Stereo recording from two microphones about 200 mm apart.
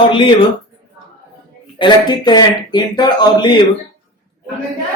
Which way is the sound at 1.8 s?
20° left (ahead or behind).